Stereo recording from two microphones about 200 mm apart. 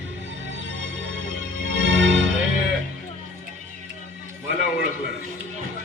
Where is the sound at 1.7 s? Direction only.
65° right (ahead or behind).